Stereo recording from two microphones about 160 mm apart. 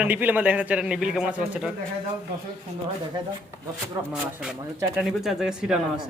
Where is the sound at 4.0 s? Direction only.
20° right (ahead or behind).